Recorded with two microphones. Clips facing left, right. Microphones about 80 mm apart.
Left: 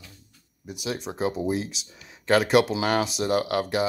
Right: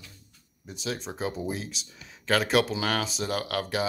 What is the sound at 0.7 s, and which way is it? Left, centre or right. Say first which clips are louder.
Speech: left 3 dB; centre.